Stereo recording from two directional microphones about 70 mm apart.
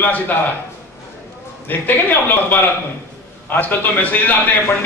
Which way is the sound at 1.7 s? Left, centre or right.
Left.